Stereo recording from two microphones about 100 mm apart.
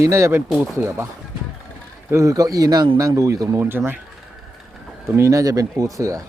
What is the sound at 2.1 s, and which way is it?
Speech, 30° right (ahead or behind).